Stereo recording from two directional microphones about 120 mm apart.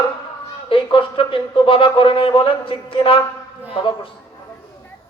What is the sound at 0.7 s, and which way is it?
Speech, 45° left (ahead or behind).